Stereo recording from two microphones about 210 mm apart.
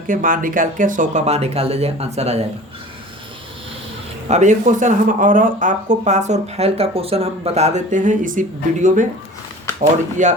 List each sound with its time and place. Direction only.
0.1 s speech: 40° right (ahead or behind)
4.3 s speech: 35° right (ahead or behind)
10.2 s speech: 35° right (ahead or behind)